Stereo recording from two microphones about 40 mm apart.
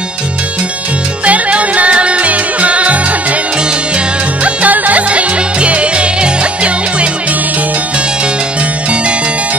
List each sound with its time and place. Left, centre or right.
1.2 s music: right
4.6 s music: right